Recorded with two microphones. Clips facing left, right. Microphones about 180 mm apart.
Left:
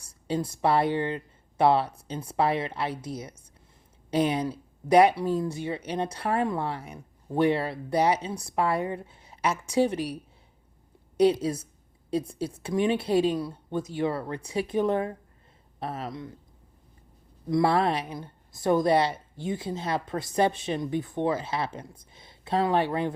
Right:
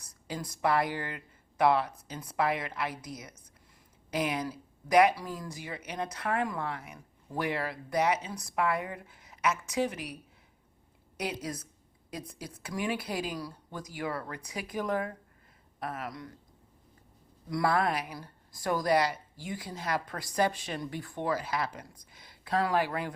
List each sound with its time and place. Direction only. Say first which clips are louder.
0.0 s a woman's voice: left 9 dB; 30° left (ahead or behind)
11.2 s speech: left 14 dB; 30° left (ahead or behind)
17.5 s speech: left 5 dB; 25° left (ahead or behind)